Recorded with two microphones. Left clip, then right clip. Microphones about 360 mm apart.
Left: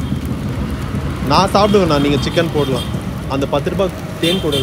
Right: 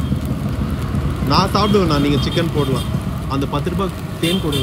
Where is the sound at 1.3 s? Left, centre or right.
Centre.